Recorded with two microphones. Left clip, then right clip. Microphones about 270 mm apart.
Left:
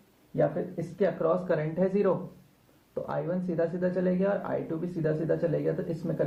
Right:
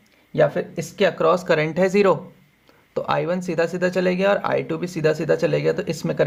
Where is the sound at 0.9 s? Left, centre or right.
Right.